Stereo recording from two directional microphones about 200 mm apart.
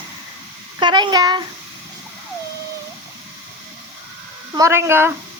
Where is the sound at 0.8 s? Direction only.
20° right (ahead or behind).